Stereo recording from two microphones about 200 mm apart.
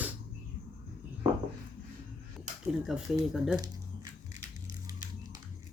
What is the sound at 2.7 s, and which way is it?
Speech, centre (ahead or behind).